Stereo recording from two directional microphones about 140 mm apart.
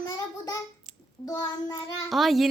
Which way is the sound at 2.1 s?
Centre (ahead or behind).